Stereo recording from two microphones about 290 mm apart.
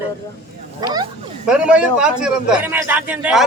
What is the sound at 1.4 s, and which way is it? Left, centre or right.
A man's voice, centre.